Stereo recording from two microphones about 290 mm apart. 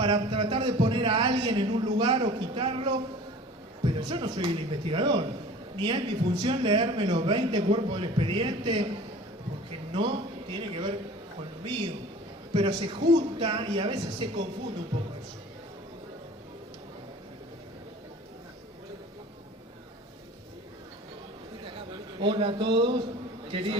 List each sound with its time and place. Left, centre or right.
0.0 s speech: centre
9.9 s a man's voice: centre
21.6 s a sound: centre
23.5 s a man's voice: centre